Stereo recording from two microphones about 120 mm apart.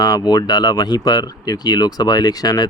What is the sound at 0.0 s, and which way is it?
Speech, 35° left (ahead or behind).